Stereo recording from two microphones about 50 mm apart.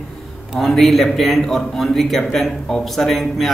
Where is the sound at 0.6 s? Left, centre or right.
Centre.